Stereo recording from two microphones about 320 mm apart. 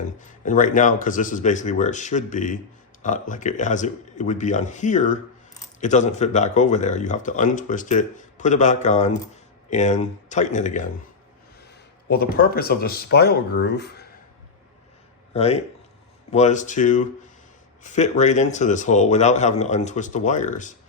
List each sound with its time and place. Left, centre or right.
0.0 s speech: left
12.0 s speech: left
15.3 s speech: centre